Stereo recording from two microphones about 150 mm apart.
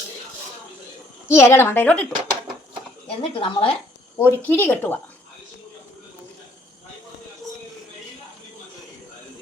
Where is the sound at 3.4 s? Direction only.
35° left (ahead or behind).